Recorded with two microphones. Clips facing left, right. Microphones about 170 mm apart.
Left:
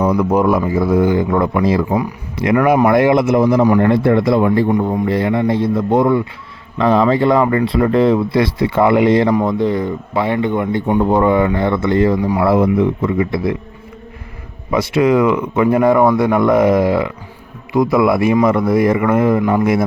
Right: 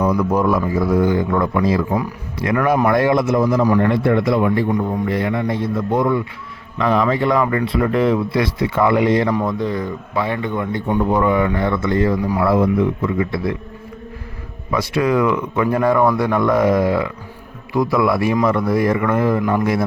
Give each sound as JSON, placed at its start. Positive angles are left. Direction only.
{"t": 0.0, "sound": "speech", "side_deg": 30}
{"t": 14.7, "sound": "speech", "side_deg": 20}